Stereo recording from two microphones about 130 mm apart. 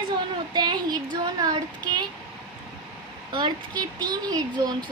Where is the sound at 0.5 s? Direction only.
35° right (ahead or behind).